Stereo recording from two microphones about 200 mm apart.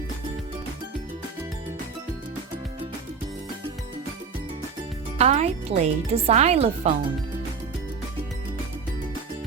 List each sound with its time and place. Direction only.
5.1 s speech: 30° right (ahead or behind)